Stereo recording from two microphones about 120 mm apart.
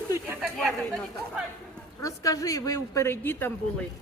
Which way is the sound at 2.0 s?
30° left (ahead or behind).